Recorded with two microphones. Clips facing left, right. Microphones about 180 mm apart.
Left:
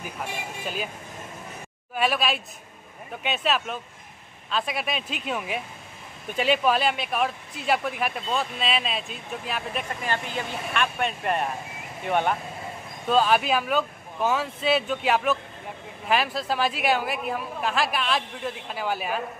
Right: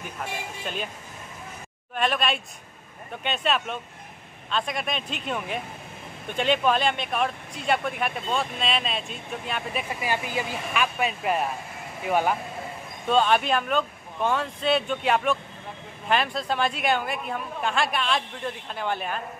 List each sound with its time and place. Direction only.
0.0 s speech: 5° left (ahead or behind)
2.0 s speech: 5° left (ahead or behind)